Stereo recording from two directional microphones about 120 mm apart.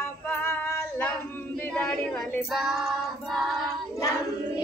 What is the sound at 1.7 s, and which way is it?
Speech, 10° left (ahead or behind).